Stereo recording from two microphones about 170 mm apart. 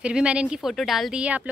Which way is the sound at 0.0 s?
5° right (ahead or behind).